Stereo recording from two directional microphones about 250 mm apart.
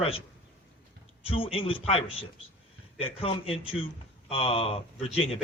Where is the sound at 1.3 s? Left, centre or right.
Left.